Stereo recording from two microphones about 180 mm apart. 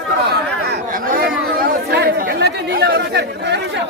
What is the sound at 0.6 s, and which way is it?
Speech, 55° right (ahead or behind).